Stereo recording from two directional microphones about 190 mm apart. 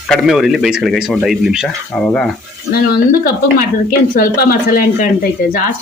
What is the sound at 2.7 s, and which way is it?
A woman's voice, 50° left (ahead or behind).